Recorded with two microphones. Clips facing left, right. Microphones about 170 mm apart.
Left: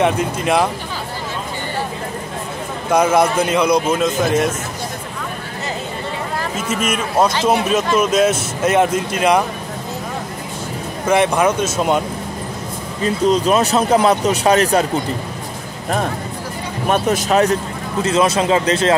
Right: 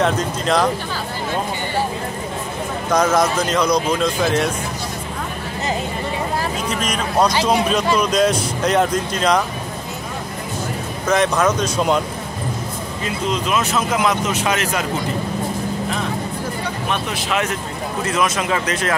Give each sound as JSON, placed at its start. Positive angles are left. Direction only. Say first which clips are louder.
{"t": 0.0, "sound": "speech", "louder": "left 2 dB", "side_deg": 10}
{"t": 2.9, "sound": "speech", "louder": "left 3 dB", "side_deg": 10}
{"t": 6.7, "sound": "speech", "louder": "left 5 dB", "side_deg": 5}
{"t": 11.1, "sound": "speech", "louder": "left 2 dB", "side_deg": 10}
{"t": 13.0, "sound": "speech", "louder": "left 8 dB", "side_deg": 35}
{"t": 16.8, "sound": "a man's voice", "louder": "left 11 dB", "side_deg": 45}